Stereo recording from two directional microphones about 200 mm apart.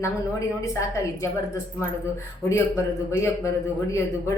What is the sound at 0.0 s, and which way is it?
A woman's voice, 15° left (ahead or behind).